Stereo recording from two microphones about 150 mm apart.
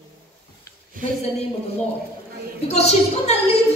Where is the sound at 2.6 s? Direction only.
45° left (ahead or behind).